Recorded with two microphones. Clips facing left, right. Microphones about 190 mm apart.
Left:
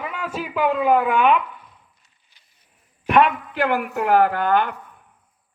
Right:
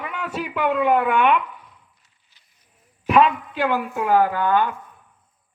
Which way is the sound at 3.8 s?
70° left (ahead or behind).